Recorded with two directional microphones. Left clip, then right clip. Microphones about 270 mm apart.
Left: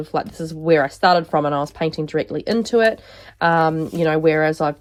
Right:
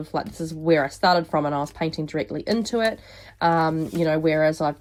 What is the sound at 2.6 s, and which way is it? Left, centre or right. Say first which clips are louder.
Speech: left 9 dB; centre.